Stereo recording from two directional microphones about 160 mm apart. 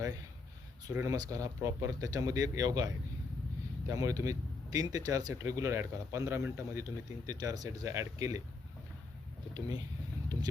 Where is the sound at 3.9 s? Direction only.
20° right (ahead or behind).